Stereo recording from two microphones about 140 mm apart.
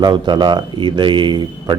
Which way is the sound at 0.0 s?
30° right (ahead or behind).